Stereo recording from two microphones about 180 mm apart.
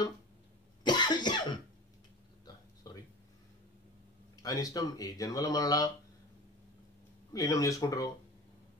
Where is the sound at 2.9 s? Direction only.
20° left (ahead or behind).